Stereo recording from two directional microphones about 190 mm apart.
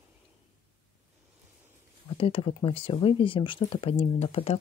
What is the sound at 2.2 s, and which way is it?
Speech, 30° left (ahead or behind).